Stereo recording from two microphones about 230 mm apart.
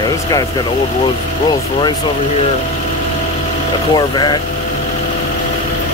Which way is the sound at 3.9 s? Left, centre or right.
Centre.